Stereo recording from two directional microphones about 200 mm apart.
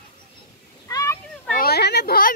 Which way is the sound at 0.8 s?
15° left (ahead or behind).